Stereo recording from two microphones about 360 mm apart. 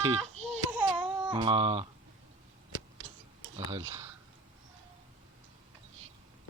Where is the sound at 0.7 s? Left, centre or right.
Centre.